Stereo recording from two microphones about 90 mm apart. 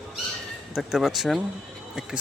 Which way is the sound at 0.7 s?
5° right (ahead or behind).